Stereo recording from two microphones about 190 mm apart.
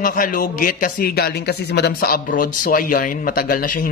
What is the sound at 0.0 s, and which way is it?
A man's voice, 45° left (ahead or behind).